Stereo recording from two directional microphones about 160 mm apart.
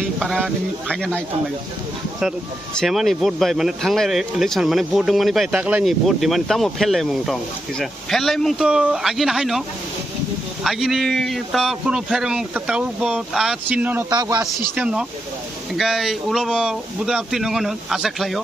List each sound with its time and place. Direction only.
0.2 s speech: centre (ahead or behind)
2.8 s speech: centre (ahead or behind)
14.1 s speech: 25° right (ahead or behind)
14.8 s speech: 5° right (ahead or behind)